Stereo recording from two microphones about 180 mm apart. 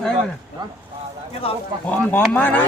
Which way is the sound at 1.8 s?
10° left (ahead or behind).